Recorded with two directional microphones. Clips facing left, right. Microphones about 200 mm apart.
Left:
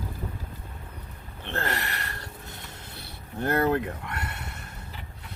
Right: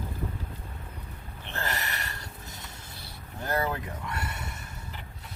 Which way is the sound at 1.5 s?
60° left (ahead or behind).